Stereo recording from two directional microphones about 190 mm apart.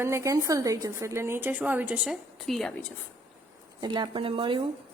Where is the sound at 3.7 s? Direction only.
25° right (ahead or behind).